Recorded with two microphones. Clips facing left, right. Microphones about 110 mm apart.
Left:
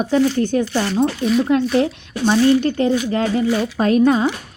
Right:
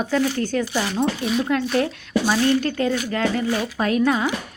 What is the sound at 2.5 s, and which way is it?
Speech, 25° left (ahead or behind).